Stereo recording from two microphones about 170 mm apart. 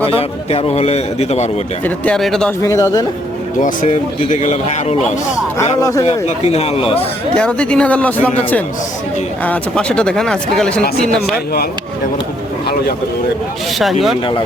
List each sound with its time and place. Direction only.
0.2 s a man's voice: 35° left (ahead or behind)
1.8 s speech: 5° left (ahead or behind)
2.6 s speech: 20° left (ahead or behind)
4.3 s a man's voice: 45° left (ahead or behind)
5.8 s speech: 20° left (ahead or behind)
6.1 s a man's voice: 40° left (ahead or behind)
7.3 s speech: 5° left (ahead or behind)
9.4 s speech: 5° left (ahead or behind)